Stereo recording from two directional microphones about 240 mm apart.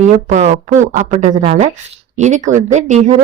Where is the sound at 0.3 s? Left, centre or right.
Right.